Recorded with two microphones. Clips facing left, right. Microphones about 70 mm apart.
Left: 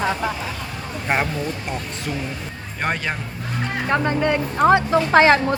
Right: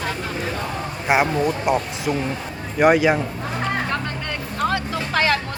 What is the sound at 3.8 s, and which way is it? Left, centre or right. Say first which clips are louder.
Speech: left 7 dB; left.